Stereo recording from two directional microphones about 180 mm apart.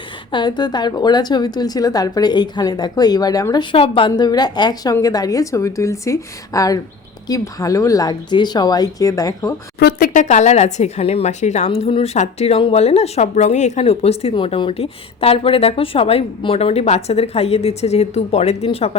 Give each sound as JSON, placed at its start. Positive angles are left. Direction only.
{"t": 0.3, "sound": "a woman's voice", "side_deg": 25}
{"t": 9.8, "sound": "speech", "side_deg": 50}